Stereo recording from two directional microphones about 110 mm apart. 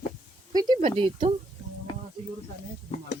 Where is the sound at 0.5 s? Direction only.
40° right (ahead or behind).